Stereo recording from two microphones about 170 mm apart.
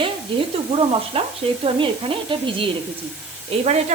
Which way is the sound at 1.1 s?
35° right (ahead or behind).